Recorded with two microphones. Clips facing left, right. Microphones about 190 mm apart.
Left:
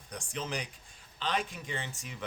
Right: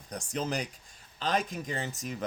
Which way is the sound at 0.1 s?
40° right (ahead or behind).